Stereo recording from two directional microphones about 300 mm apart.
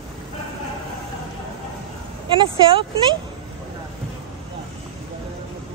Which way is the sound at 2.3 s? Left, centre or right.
Centre.